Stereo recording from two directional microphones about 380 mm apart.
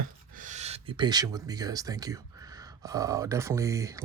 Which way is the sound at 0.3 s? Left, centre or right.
Centre.